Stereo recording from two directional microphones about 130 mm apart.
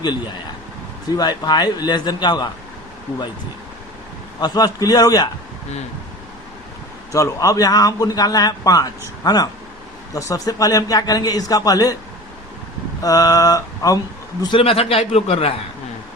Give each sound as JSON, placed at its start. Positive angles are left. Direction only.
{"t": 1.1, "sound": "a man's voice", "side_deg": 30}
{"t": 4.4, "sound": "a man's voice", "side_deg": 30}
{"t": 7.1, "sound": "a man's voice", "side_deg": 25}
{"t": 13.0, "sound": "a man's voice", "side_deg": 30}
{"t": 14.4, "sound": "a man's voice", "side_deg": 45}